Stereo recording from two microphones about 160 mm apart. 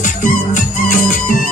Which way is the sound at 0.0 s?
50° left (ahead or behind).